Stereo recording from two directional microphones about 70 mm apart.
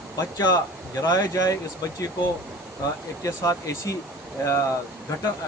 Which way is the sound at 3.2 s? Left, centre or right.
Left.